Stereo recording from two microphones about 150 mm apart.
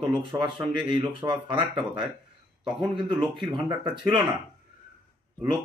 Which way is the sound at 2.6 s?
5° right (ahead or behind).